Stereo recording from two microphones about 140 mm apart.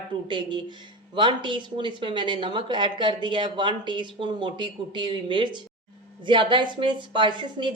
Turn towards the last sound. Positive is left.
turn(degrees=-35)  # may be behind; listen again after turning